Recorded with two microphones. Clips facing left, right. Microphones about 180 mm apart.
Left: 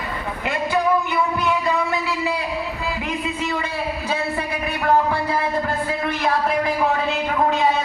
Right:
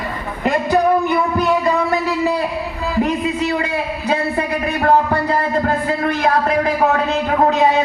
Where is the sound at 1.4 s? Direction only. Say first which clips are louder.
Right 5 dB; 40° right (ahead or behind).